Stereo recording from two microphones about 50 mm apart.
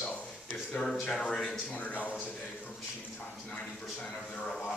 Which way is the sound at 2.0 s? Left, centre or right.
Left.